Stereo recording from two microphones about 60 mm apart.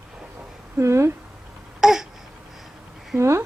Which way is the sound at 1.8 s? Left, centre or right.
Centre.